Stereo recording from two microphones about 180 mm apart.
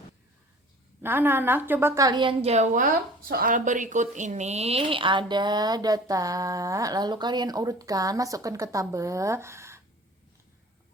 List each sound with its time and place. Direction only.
1.0 s a woman's voice: 10° right (ahead or behind)